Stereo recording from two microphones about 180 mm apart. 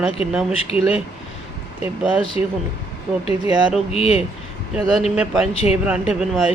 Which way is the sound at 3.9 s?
35° left (ahead or behind).